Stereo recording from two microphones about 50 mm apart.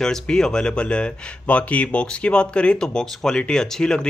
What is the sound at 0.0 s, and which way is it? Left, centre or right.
Speech, centre.